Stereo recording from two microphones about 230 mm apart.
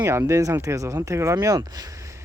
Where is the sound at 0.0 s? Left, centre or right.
Centre.